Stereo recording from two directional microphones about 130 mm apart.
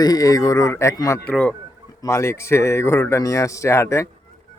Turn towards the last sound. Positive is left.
turn(degrees=20)  # may be behind; listen again after turning